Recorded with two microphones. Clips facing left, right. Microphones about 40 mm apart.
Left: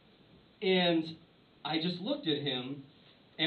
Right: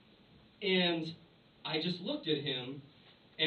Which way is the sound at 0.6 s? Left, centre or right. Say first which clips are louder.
Left 4 dB; centre.